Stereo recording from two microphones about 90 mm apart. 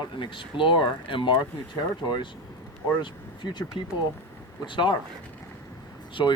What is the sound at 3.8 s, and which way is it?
Speech, 80° left.